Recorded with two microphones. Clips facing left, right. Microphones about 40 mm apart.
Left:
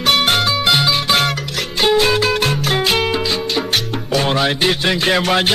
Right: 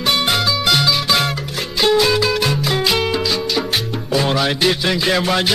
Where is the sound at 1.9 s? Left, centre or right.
Left.